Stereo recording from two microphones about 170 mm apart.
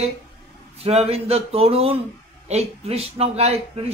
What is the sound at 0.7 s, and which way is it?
A man's voice, 40° right (ahead or behind).